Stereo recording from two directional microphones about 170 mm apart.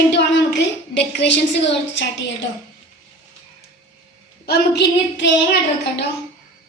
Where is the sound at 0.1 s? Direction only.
90° left.